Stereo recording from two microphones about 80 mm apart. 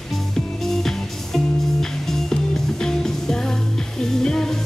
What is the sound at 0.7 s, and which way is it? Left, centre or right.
Music, centre.